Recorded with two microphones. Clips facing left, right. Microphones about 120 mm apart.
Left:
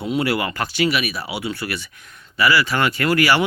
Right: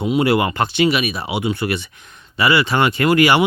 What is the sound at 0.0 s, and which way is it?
Speech, 20° right (ahead or behind).